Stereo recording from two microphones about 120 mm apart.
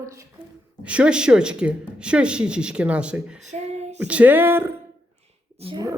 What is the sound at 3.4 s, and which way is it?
Child singing, 75° right (ahead or behind).